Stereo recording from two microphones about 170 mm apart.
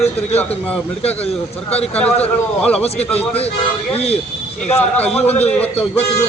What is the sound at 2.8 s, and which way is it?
Speech, 35° left (ahead or behind).